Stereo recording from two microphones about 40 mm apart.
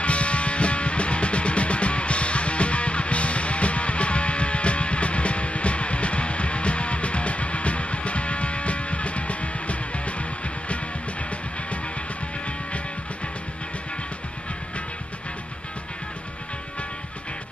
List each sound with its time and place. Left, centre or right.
0.0 s music: left